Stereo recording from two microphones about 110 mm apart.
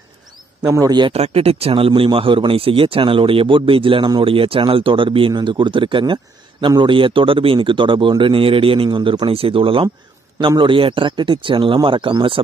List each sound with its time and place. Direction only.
0.7 s a man's voice: 35° right (ahead or behind)
1.1 s speech: 65° right (ahead or behind); by 12.4 s 50° right (ahead or behind)